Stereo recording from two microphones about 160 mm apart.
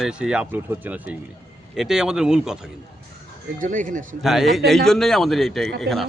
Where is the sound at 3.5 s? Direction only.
55° right (ahead or behind).